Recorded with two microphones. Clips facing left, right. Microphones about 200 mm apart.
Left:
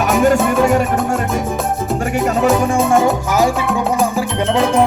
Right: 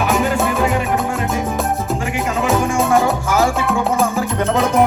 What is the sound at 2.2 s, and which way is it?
Music, 45° left (ahead or behind).